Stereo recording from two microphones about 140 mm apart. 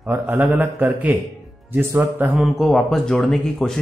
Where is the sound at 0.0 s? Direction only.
10° right (ahead or behind).